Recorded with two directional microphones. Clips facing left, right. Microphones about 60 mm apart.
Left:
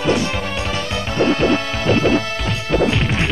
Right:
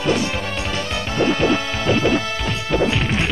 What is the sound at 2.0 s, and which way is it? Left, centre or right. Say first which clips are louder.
Music: left 3 dB; left.